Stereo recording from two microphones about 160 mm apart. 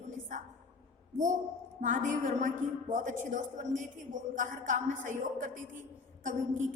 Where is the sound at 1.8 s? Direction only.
50° right (ahead or behind).